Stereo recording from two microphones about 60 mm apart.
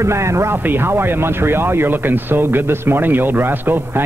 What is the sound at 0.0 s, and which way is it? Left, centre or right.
Speech, right.